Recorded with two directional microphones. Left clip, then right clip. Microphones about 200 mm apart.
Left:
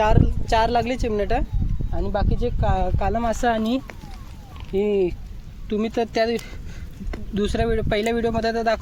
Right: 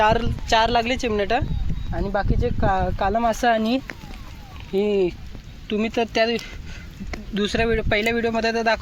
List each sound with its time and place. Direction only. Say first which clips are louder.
0.0 s speech: right 2 dB; 10° right (ahead or behind)
1.9 s speech: right 2 dB; 20° right (ahead or behind); by 8.4 s centre (ahead or behind)
8.4 s speech: right 1 dB; 10° right (ahead or behind)